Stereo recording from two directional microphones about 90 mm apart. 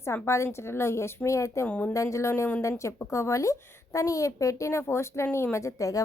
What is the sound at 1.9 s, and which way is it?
A woman's voice, 35° left (ahead or behind).